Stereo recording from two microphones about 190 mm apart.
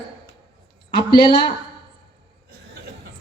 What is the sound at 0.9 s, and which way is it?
Speech, 25° left (ahead or behind).